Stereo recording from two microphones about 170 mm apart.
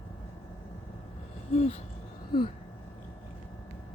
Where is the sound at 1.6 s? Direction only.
40° left (ahead or behind).